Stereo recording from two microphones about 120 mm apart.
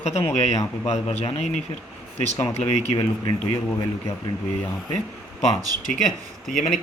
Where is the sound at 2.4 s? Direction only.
65° left (ahead or behind).